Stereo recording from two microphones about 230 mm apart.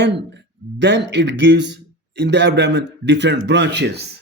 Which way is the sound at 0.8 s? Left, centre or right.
Right.